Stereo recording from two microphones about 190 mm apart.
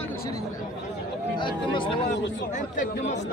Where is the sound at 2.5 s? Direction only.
45° left (ahead or behind).